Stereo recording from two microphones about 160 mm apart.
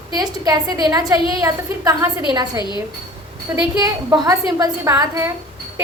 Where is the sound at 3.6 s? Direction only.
25° right (ahead or behind).